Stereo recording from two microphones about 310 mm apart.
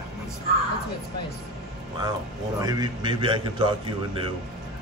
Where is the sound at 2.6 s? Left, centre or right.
Centre.